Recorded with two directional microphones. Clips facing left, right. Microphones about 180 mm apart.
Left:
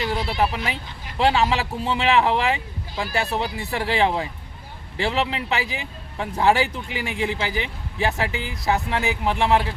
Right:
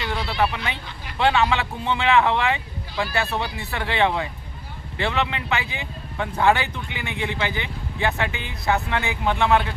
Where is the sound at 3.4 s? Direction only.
35° left (ahead or behind).